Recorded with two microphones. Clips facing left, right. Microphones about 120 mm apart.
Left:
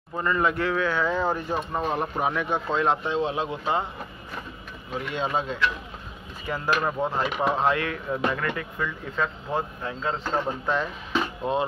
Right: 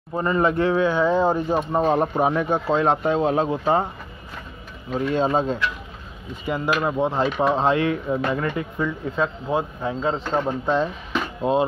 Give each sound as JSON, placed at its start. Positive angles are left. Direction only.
{"t": 0.1, "sound": "speech", "side_deg": -25}
{"t": 1.7, "sound": "speech", "side_deg": -35}
{"t": 4.9, "sound": "speech", "side_deg": -35}
{"t": 6.4, "sound": "speech", "side_deg": -15}
{"t": 7.1, "sound": "speech", "side_deg": -25}